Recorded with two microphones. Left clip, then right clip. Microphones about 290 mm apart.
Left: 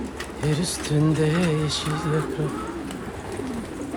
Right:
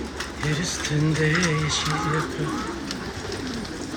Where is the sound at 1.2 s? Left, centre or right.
Centre.